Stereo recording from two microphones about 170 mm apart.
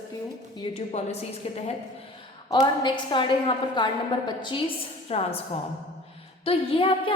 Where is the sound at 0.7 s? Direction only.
35° left (ahead or behind).